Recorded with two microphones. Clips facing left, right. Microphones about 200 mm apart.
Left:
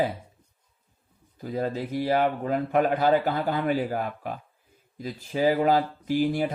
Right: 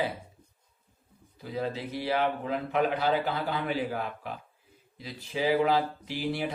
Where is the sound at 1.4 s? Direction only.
45° left (ahead or behind).